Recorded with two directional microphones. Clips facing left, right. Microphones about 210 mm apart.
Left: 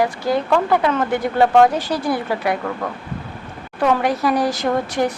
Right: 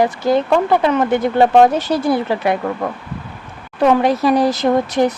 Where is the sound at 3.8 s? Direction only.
25° right (ahead or behind).